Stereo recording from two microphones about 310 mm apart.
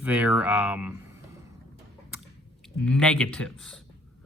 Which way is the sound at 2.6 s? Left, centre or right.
Centre.